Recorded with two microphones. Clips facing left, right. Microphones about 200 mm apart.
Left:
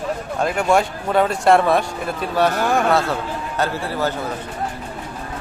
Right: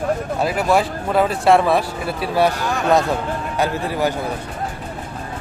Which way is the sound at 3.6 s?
15° right (ahead or behind).